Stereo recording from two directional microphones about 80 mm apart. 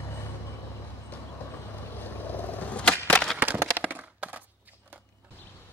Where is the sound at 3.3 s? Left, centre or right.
Right.